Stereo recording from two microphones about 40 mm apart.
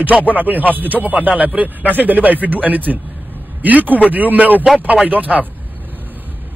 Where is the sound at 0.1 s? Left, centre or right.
Right.